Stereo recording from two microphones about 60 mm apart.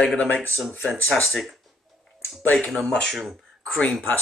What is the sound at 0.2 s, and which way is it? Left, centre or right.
Speech, left.